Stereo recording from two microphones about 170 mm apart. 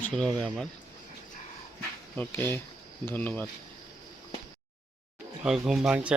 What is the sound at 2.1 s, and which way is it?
Speech, 10° left (ahead or behind).